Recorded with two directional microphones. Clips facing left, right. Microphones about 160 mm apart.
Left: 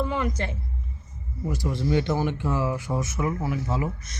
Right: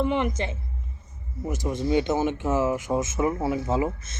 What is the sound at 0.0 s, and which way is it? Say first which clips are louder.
Speech: right 2 dB; 25° right (ahead or behind).